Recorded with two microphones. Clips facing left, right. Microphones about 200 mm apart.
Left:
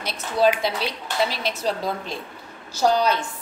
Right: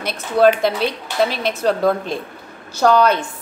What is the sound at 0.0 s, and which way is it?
Speech, 55° right (ahead or behind).